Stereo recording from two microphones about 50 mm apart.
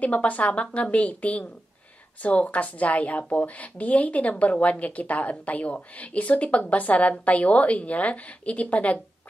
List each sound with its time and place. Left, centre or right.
0.0 s a woman's voice: left